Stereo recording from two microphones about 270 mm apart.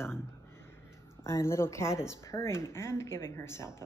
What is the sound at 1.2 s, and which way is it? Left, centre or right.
Speech, centre.